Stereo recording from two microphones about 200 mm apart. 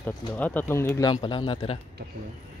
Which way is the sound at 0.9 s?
25° left (ahead or behind).